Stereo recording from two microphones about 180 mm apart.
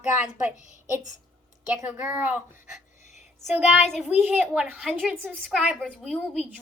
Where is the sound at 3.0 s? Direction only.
40° left (ahead or behind).